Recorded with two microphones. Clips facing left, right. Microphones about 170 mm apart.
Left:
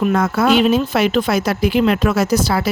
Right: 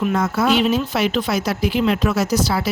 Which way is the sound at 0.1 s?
60° left (ahead or behind).